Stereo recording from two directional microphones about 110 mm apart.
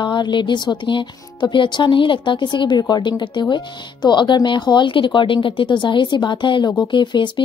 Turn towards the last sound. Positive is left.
turn(degrees=45)  # may be behind; listen again after turning